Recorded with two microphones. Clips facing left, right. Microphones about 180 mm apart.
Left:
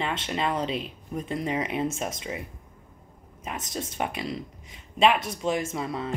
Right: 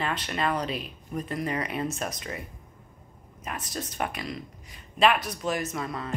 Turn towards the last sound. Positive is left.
turn(degrees=25)  # may be behind; listen again after turning